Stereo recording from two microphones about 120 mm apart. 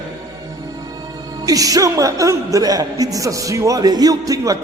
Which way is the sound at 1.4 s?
30° right (ahead or behind).